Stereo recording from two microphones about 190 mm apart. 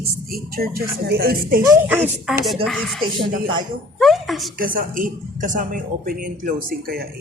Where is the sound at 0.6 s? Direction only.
50° right (ahead or behind).